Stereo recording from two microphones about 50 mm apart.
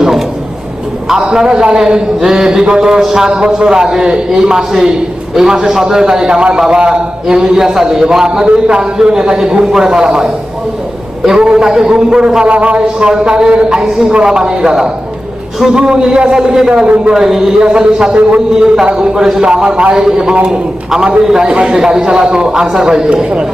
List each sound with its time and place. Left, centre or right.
1.0 s a man's voice: centre
11.3 s a man's voice: centre
18.9 s a man's voice: centre